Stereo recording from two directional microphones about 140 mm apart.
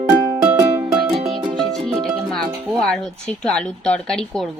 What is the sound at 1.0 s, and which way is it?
Music, 35° right (ahead or behind).